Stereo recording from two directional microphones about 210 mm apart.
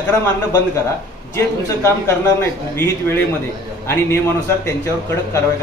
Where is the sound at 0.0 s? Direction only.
10° left (ahead or behind).